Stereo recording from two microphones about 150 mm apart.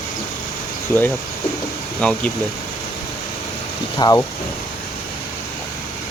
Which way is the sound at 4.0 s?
25° left (ahead or behind).